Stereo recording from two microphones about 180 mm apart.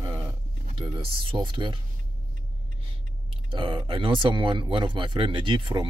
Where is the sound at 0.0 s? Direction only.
25° right (ahead or behind).